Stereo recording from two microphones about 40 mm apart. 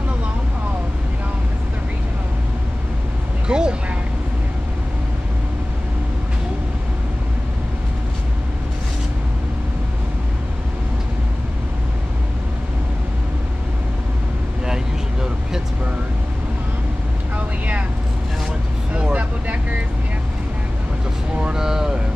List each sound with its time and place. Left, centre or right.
3.4 s a sound: right
19.1 s vehicle: right
21.5 s vehicle: centre